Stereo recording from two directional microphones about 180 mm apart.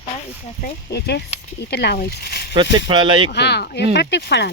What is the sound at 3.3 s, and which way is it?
Speech, 65° left (ahead or behind).